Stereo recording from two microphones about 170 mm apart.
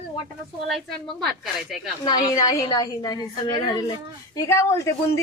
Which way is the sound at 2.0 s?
20° left (ahead or behind).